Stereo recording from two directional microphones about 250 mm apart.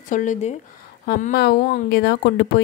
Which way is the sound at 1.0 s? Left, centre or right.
Left.